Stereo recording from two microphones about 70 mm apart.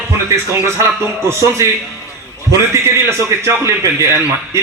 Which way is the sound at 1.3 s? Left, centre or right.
Right.